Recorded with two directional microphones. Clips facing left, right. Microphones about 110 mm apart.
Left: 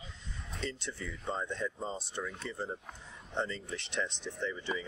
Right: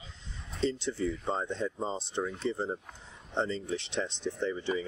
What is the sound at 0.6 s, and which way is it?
Speech, 30° right (ahead or behind).